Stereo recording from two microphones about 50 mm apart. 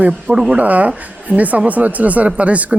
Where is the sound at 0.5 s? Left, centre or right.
Right.